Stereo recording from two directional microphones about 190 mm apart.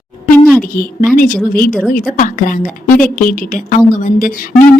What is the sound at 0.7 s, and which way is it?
A woman's voice, 50° left (ahead or behind).